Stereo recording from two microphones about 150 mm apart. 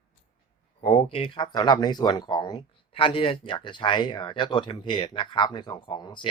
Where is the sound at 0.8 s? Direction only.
45° left (ahead or behind).